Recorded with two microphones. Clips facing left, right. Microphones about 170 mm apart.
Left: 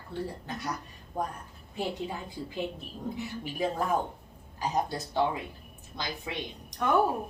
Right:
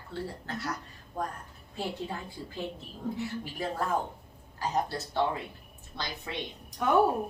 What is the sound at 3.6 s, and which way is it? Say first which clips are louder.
Speech: left 3 dB; 15° left (ahead or behind).